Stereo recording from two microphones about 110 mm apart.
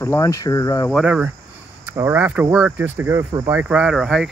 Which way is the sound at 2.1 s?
15° right (ahead or behind).